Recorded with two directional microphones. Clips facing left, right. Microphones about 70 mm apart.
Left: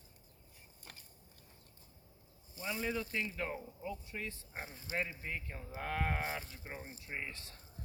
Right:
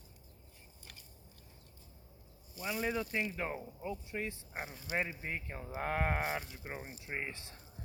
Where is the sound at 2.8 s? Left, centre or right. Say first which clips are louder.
Right 3 dB; right.